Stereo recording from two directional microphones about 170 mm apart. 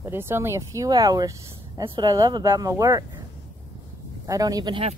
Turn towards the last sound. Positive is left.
turn(degrees=-25)  # may be behind; listen again after turning